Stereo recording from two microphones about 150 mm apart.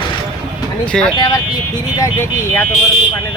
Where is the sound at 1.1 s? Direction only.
30° left (ahead or behind).